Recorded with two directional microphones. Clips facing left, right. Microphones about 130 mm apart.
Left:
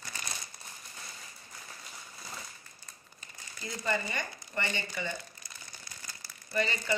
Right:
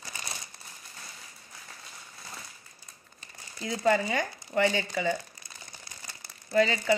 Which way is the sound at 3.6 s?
90° right.